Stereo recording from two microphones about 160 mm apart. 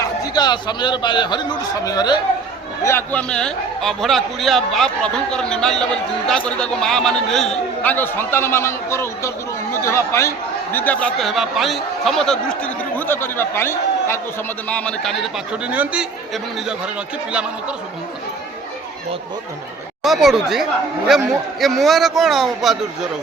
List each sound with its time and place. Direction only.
0.0 s a man's voice: 25° left (ahead or behind)
2.8 s a man's voice: 10° left (ahead or behind); by 16.9 s 5° right (ahead or behind)
20.0 s a man's voice: centre (ahead or behind)